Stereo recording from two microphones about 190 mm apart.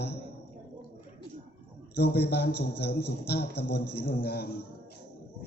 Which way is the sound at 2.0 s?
60° left (ahead or behind).